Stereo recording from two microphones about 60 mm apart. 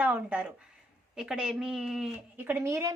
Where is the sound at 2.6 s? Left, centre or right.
Right.